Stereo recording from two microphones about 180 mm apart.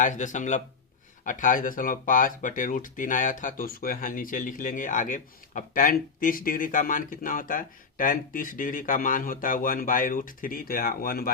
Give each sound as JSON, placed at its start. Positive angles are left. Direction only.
{"t": 0.0, "sound": "speech", "side_deg": 45}